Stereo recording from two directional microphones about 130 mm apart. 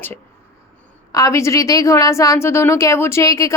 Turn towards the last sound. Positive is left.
turn(degrees=25)  # may be behind; listen again after turning